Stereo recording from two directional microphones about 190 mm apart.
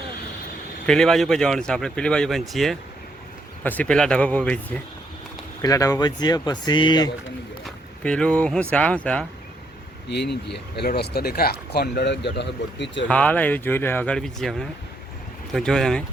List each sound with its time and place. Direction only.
0.9 s speech: 5° left (ahead or behind)
5.6 s speech: 20° left (ahead or behind)
7.6 s a sound: 5° left (ahead or behind)
8.7 s speech: 5° left (ahead or behind)
10.1 s speech: 60° left (ahead or behind)
13.1 s speech: 5° left (ahead or behind)